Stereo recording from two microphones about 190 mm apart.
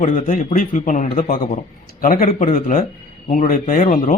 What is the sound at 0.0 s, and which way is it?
A man's voice, 40° left (ahead or behind).